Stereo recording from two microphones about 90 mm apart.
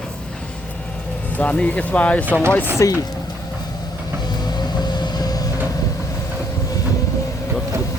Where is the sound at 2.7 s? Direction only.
35° left (ahead or behind).